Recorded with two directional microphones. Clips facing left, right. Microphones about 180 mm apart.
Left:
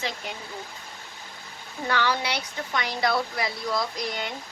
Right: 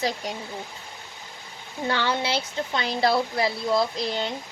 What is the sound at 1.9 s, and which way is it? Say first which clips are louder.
Speech: right 1 dB; 25° right (ahead or behind).